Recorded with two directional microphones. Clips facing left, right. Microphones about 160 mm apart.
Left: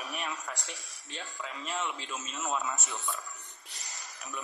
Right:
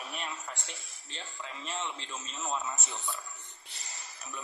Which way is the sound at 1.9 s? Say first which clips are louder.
Left 3 dB; 15° left (ahead or behind).